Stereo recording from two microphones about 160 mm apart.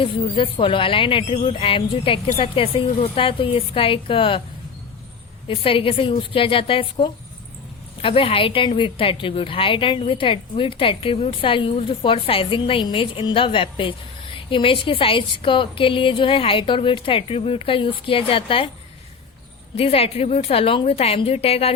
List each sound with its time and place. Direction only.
0.0 s a woman's voice: 35° left (ahead or behind)
5.5 s a woman's voice: 35° left (ahead or behind)
19.7 s a woman's voice: 40° left (ahead or behind)